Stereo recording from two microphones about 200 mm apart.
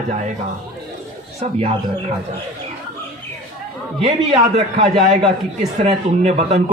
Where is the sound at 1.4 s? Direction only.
35° right (ahead or behind).